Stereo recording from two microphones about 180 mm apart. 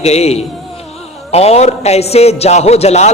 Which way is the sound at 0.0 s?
35° left (ahead or behind).